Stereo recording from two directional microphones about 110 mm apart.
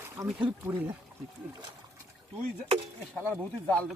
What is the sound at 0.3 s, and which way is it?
Speech, 10° right (ahead or behind).